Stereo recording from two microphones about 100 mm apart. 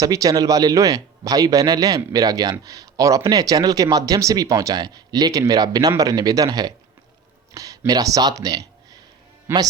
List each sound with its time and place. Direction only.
0.0 s a man's voice: 35° right (ahead or behind)
9.5 s speech: 25° right (ahead or behind)